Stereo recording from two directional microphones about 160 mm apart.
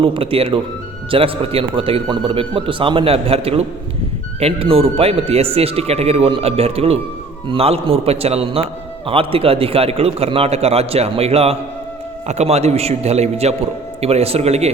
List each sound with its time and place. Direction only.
0.0 s speech: 35° right (ahead or behind)